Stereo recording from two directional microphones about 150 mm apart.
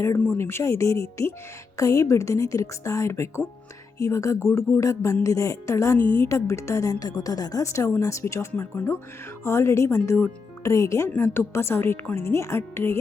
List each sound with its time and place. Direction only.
0.0 s a woman's voice: 15° left (ahead or behind)